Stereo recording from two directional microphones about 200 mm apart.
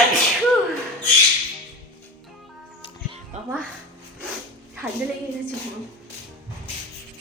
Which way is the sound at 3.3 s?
35° right (ahead or behind).